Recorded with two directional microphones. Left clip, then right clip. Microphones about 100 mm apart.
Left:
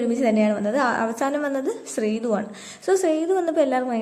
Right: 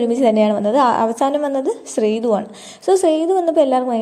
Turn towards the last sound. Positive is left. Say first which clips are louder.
# right 6 dB
turn(degrees=-35)  # may be behind; listen again after turning